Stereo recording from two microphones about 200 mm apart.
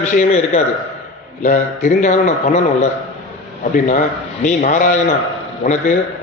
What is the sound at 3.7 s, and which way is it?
A man's voice, 40° left (ahead or behind).